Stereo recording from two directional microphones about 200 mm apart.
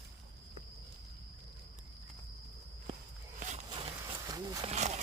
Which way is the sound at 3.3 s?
35° right (ahead or behind).